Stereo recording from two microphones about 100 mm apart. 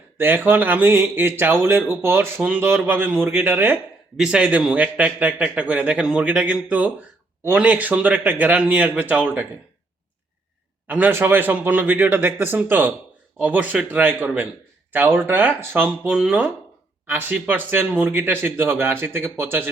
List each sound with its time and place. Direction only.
0.2 s speech: 20° right (ahead or behind)
4.2 s a man's voice: 10° right (ahead or behind)
10.8 s a man's voice: 15° right (ahead or behind)